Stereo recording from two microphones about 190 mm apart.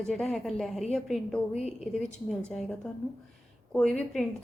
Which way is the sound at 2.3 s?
5° left (ahead or behind).